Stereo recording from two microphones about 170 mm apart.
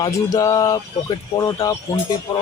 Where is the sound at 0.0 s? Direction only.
20° left (ahead or behind).